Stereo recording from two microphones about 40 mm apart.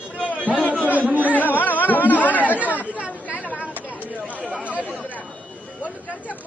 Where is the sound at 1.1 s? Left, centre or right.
Right.